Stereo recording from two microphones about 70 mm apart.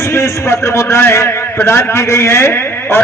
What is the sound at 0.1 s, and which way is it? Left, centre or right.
A man's voice, left.